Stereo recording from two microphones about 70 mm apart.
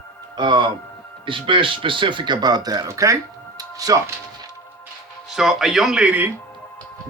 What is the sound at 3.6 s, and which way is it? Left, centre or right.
Music, right.